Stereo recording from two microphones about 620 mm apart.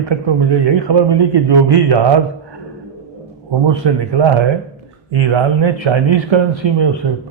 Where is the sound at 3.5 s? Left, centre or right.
Right.